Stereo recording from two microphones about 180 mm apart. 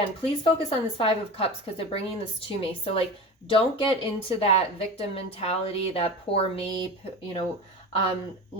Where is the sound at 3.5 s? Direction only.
30° left (ahead or behind).